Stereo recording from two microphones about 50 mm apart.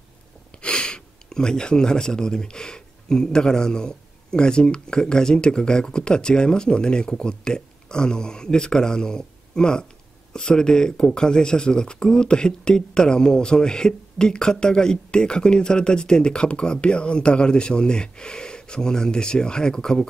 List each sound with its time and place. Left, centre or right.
0.6 s speech: left